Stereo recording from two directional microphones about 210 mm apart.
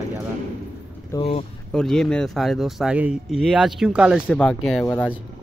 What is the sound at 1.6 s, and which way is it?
Speech, centre (ahead or behind).